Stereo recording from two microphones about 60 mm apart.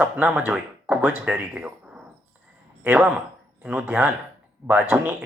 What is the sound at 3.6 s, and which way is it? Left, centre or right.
Speech, right.